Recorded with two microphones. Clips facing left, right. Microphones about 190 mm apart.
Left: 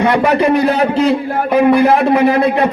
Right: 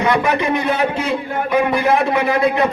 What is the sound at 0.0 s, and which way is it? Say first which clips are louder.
A man's voice: left 5 dB; 35° left (ahead or behind).